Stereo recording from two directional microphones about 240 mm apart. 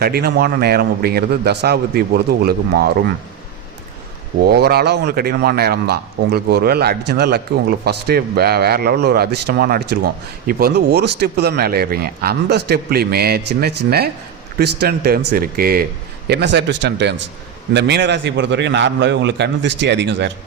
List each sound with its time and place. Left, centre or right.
0.0 s a man's voice: right
4.4 s a man's voice: right